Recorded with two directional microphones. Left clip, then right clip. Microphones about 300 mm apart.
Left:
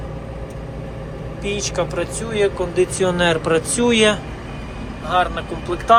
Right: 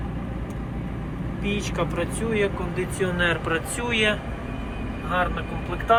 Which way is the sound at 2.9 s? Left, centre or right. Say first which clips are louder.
Left 2 dB; centre.